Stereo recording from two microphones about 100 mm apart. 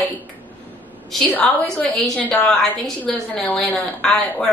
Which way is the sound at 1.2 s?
15° left (ahead or behind).